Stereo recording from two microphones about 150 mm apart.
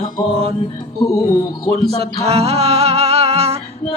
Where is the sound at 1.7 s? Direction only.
40° right (ahead or behind).